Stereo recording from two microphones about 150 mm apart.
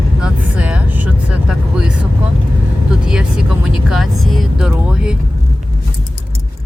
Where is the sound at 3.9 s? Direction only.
Centre (ahead or behind).